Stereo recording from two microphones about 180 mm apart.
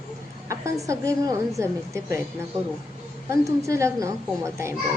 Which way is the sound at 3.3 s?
15° right (ahead or behind).